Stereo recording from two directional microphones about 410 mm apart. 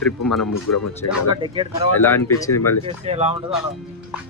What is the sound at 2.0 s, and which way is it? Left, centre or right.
Speech, centre.